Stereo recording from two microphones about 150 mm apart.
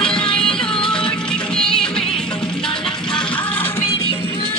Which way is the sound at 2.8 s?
30° left (ahead or behind).